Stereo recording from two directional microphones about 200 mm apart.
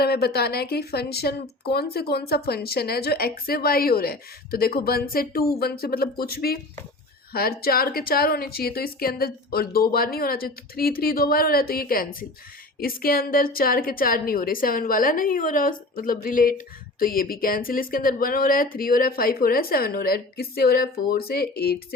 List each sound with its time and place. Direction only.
0.0 s speech: 50° left (ahead or behind)